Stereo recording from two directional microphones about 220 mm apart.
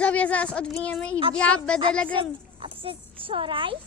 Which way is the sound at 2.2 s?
25° right (ahead or behind).